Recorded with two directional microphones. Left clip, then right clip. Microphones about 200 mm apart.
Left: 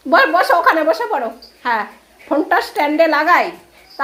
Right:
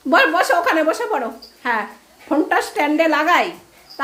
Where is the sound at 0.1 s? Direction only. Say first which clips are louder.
Left 3 dB; 15° right (ahead or behind).